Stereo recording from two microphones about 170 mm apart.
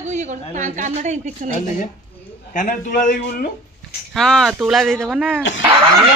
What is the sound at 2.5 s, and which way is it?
A man's voice, 50° left (ahead or behind).